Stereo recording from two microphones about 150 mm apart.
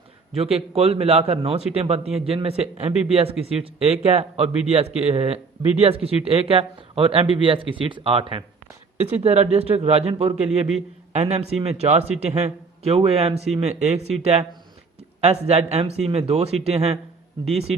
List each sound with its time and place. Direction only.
0.3 s a man's voice: 40° right (ahead or behind)